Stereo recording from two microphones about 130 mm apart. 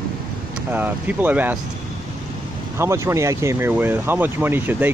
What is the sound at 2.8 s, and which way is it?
Speech, 20° right (ahead or behind).